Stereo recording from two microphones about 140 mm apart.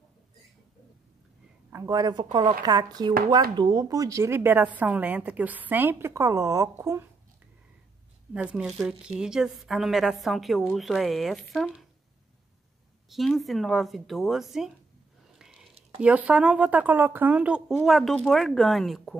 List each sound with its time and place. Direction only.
1.7 s speech: 20° right (ahead or behind)
8.3 s speech: 10° right (ahead or behind)
13.1 s speech: centre (ahead or behind)
16.0 s speech: 10° right (ahead or behind)